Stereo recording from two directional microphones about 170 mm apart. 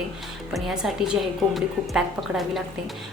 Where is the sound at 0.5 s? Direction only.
5° right (ahead or behind).